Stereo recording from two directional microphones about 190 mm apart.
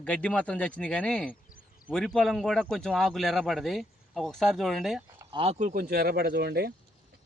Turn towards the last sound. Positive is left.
turn(degrees=-55)  # may be behind; listen again after turning